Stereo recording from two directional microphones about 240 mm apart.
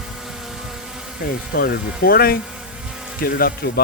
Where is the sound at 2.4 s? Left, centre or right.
Centre.